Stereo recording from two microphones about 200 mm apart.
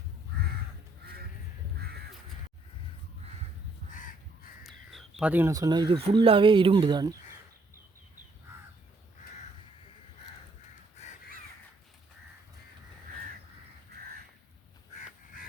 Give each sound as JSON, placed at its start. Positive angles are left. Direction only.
{"t": 1.8, "sound": "crow", "side_deg": -50}
{"t": 4.6, "sound": "speech", "side_deg": 0}